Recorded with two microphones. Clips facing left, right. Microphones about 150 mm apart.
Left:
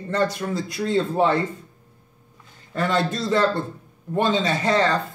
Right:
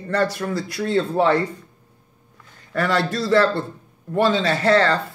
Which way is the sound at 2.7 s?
25° left (ahead or behind).